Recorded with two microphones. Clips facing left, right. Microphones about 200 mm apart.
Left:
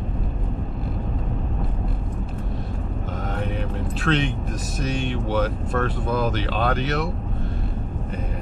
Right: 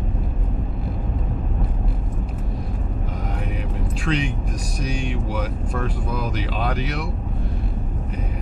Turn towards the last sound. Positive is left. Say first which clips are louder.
# left 3 dB
turn(degrees=0)  # may be behind; listen again after turning